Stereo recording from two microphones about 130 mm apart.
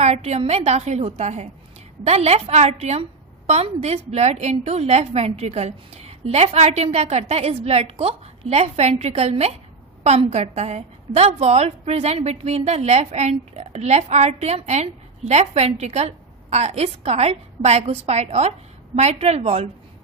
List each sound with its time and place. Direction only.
0.0 s a woman's voice: 55° right (ahead or behind)